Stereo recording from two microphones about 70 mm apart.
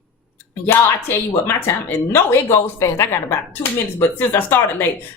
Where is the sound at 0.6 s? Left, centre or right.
Left.